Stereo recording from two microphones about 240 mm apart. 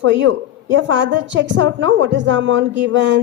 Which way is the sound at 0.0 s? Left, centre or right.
Right.